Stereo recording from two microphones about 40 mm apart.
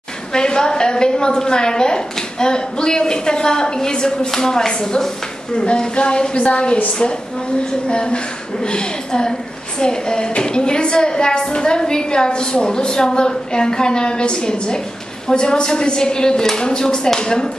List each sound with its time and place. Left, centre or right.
0.3 s a woman's voice: left